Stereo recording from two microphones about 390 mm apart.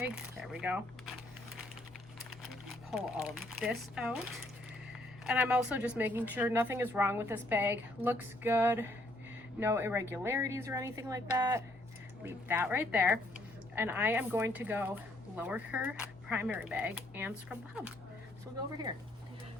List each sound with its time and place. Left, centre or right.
0.0 s speech: centre
2.9 s a woman's voice: centre
5.2 s a woman's voice: centre